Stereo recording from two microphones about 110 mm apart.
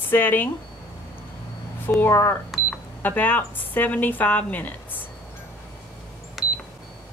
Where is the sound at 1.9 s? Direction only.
25° left (ahead or behind).